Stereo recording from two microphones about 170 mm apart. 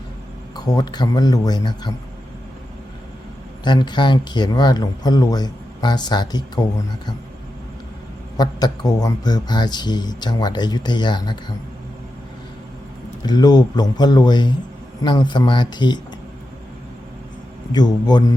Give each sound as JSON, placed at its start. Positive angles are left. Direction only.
{"t": 0.5, "sound": "speech", "side_deg": 20}
{"t": 3.6, "sound": "speech", "side_deg": 25}
{"t": 8.4, "sound": "speech", "side_deg": 25}
{"t": 13.2, "sound": "speech", "side_deg": 25}
{"t": 17.7, "sound": "speech", "side_deg": 25}